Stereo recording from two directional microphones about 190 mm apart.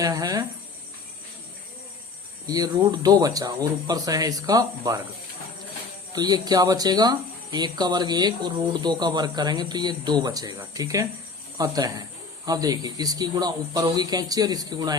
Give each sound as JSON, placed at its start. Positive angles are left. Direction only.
{"t": 0.0, "sound": "speech", "side_deg": -20}
{"t": 2.5, "sound": "speech", "side_deg": -20}
{"t": 6.1, "sound": "speech", "side_deg": -20}